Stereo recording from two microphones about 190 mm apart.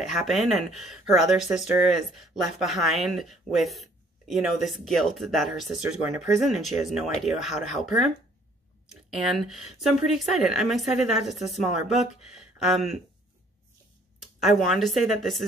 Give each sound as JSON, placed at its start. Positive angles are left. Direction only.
{"t": 0.1, "sound": "speech", "side_deg": 0}
{"t": 9.1, "sound": "speech", "side_deg": 0}
{"t": 14.4, "sound": "speech", "side_deg": 0}